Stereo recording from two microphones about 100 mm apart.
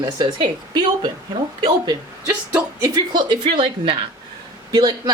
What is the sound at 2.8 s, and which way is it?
A woman's voice, 45° right (ahead or behind).